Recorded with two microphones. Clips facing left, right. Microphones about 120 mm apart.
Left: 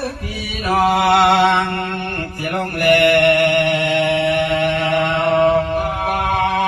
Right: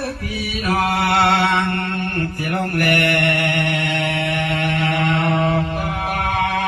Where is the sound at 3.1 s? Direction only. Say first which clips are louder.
Left 7 dB; 20° left (ahead or behind).